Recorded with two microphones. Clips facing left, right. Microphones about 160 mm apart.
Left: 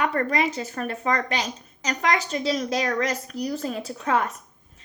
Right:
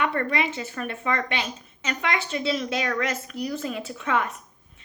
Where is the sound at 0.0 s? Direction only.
35° left (ahead or behind).